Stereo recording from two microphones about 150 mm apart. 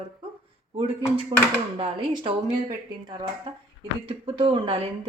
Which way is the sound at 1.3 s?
25° right (ahead or behind).